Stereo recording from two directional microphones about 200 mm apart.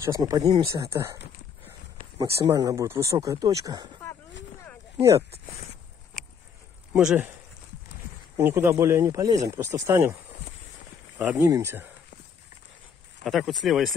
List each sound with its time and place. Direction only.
0.0 s speech: 15° right (ahead or behind)
2.1 s speech: 15° right (ahead or behind)
4.9 s speech: 15° right (ahead or behind)
6.9 s speech: 5° right (ahead or behind)
8.4 s speech: 15° right (ahead or behind)
11.1 s speech: 10° right (ahead or behind)
13.2 s speech: centre (ahead or behind)